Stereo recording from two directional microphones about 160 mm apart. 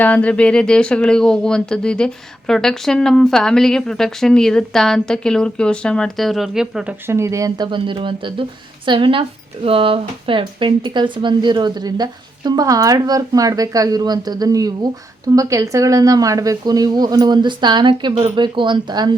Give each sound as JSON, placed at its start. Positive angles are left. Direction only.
{"t": 0.0, "sound": "speech", "side_deg": 10}
{"t": 7.1, "sound": "speech", "side_deg": -20}